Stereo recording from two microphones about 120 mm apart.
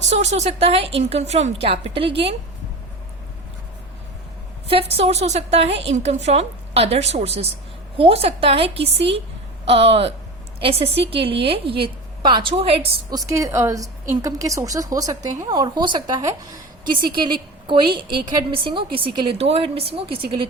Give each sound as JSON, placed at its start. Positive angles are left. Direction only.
{"t": 0.1, "sound": "a woman's voice", "side_deg": -70}
{"t": 4.7, "sound": "a woman's voice", "side_deg": -55}
{"t": 13.1, "sound": "a woman's voice", "side_deg": -30}
{"t": 19.4, "sound": "a woman's voice", "side_deg": -55}